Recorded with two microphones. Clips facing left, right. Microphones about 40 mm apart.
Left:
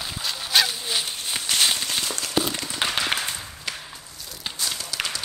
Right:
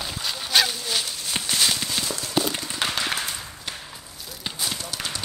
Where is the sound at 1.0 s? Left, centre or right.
Left.